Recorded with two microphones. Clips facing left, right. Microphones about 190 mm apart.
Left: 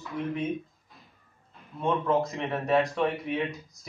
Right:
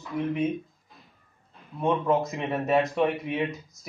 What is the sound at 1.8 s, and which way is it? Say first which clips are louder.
Speech: right 2 dB; 15° right (ahead or behind).